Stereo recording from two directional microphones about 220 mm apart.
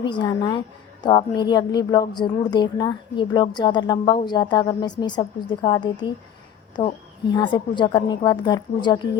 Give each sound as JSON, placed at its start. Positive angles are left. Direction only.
{"t": 0.0, "sound": "a woman's voice", "side_deg": 20}